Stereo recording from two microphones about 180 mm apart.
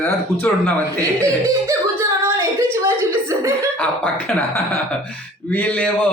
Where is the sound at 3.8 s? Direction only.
10° left (ahead or behind).